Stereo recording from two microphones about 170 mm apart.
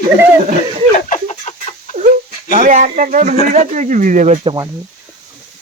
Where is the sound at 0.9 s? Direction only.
45° left (ahead or behind).